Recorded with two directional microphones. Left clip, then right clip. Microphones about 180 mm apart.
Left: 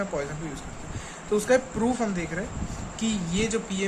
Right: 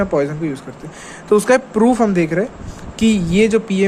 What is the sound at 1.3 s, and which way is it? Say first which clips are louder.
Speech: right 10 dB; 50° right (ahead or behind).